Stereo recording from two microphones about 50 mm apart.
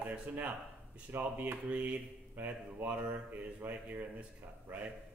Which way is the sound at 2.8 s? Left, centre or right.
Right.